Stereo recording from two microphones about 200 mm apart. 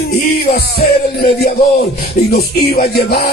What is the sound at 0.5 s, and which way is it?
Music, 55° left (ahead or behind).